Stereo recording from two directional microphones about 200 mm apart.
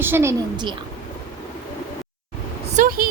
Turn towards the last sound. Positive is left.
turn(degrees=-45)  # may be behind; listen again after turning